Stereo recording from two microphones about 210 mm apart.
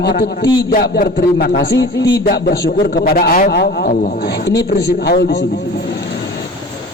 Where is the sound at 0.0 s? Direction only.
50° left (ahead or behind).